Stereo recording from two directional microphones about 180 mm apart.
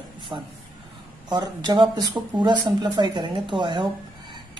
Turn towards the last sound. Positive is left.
turn(degrees=-25)  # may be behind; listen again after turning